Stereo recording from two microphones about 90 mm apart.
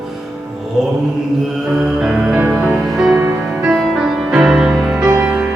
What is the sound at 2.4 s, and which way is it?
Music, 20° right (ahead or behind).